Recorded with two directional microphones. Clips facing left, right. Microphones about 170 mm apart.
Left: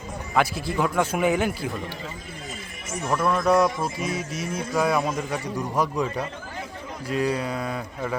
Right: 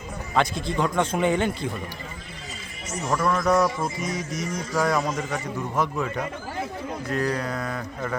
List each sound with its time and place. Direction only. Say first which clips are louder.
0.3 s a man's voice: even; 5° left (ahead or behind)
3.1 s a man's voice: left 1 dB; 10° left (ahead or behind)
4.1 s music: even; 30° left (ahead or behind)
4.8 s a man's voice: left 1 dB; 10° left (ahead or behind)